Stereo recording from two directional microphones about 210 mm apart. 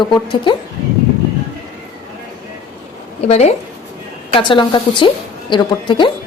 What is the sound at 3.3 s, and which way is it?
A woman's voice, 30° left (ahead or behind).